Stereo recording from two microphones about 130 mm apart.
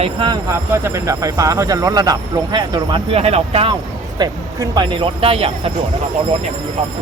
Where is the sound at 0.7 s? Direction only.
20° right (ahead or behind).